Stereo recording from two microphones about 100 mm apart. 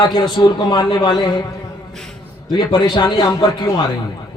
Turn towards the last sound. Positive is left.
turn(degrees=35)  # may be behind; listen again after turning